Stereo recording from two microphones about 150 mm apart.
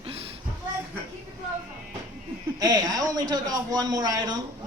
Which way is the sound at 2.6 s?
25° right (ahead or behind).